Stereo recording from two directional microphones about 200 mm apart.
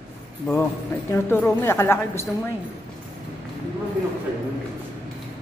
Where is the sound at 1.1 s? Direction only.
10° left (ahead or behind).